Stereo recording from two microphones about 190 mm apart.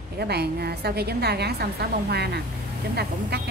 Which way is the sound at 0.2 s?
60° right (ahead or behind).